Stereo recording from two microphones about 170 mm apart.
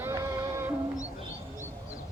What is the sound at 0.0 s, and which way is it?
Music, 15° right (ahead or behind).